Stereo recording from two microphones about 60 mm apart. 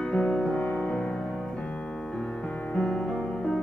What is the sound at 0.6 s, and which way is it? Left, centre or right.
Music, left.